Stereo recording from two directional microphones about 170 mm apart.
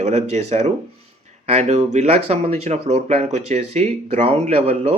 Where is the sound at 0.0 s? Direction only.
40° right (ahead or behind).